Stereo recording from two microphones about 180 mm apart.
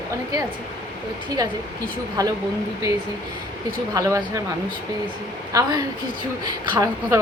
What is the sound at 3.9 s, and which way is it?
Speech, 15° right (ahead or behind).